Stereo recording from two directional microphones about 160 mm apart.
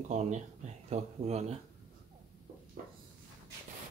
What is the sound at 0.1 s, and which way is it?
Speech, 45° right (ahead or behind).